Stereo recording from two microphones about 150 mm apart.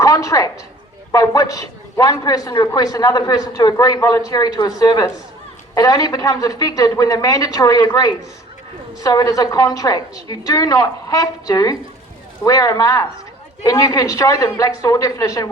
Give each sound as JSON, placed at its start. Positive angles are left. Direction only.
{"t": 0.0, "sound": "a sound", "side_deg": 20}
{"t": 1.1, "sound": "a woman's voice", "side_deg": 25}
{"t": 9.0, "sound": "a woman's voice", "side_deg": 25}